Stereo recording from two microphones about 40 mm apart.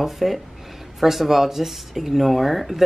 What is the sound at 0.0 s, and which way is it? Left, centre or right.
Speech, centre.